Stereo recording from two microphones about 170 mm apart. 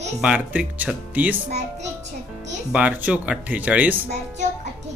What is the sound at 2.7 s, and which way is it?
Speech, 5° right (ahead or behind).